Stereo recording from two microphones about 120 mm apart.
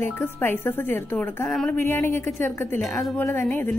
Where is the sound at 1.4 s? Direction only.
5° left (ahead or behind).